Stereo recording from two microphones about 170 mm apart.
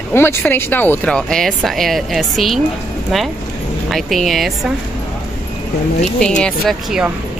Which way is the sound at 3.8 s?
Centre (ahead or behind).